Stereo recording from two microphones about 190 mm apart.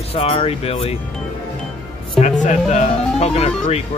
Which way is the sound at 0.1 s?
30° left (ahead or behind).